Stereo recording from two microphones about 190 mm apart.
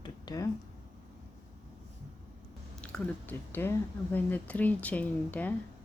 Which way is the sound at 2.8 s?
5° left (ahead or behind).